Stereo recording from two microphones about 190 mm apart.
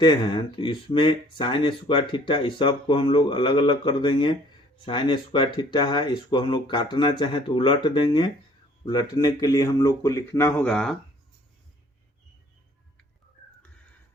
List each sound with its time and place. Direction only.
0.0 s speech: 25° left (ahead or behind); by 10.9 s 5° left (ahead or behind)